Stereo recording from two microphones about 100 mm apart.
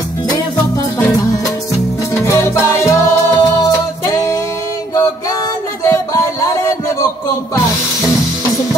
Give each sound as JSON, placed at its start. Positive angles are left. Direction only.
{"t": 2.2, "sound": "music", "side_deg": 25}
{"t": 5.9, "sound": "music", "side_deg": 30}